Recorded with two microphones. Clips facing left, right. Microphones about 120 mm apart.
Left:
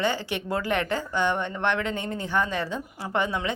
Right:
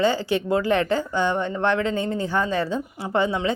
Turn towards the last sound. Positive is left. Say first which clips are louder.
# right 4 dB
turn(degrees=-30)  # may be behind; listen again after turning